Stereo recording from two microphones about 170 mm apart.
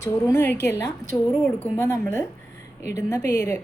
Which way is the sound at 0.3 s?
15° left (ahead or behind).